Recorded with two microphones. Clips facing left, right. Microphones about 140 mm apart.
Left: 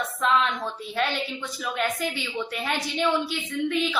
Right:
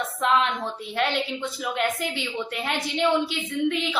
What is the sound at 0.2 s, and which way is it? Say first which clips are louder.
Speech: right 1 dB; 20° right (ahead or behind).